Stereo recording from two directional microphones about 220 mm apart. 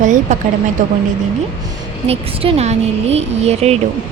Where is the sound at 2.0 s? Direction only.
25° right (ahead or behind).